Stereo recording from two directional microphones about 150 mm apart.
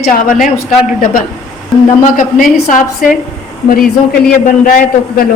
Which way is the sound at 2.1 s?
60° left (ahead or behind).